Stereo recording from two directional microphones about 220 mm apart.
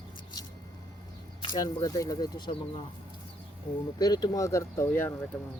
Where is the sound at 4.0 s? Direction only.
20° left (ahead or behind).